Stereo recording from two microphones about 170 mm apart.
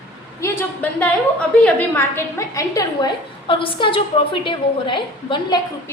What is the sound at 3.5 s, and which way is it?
A woman's voice, 30° left (ahead or behind).